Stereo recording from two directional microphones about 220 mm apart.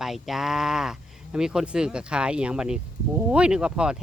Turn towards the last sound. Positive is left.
turn(degrees=-5)  # may be behind; listen again after turning